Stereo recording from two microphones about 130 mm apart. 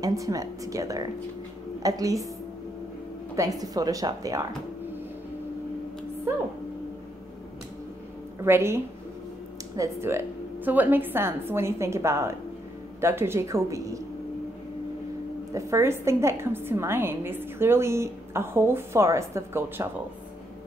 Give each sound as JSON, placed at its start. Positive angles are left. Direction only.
{"t": 0.0, "sound": "a woman's voice", "side_deg": -25}
{"t": 3.3, "sound": "a woman's voice", "side_deg": -30}
{"t": 8.4, "sound": "a woman's voice", "side_deg": -20}
{"t": 15.5, "sound": "a woman's voice", "side_deg": -25}